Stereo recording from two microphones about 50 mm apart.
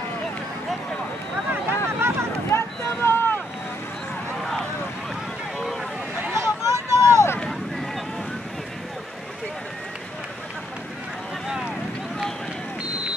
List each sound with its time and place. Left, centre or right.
1.5 s vehicle: right
2.5 s boat: left
4.4 s vehicle: centre
6.3 s a sound: right